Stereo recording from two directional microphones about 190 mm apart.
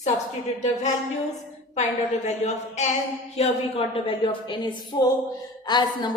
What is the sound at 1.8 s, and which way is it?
A woman's voice, 35° left (ahead or behind).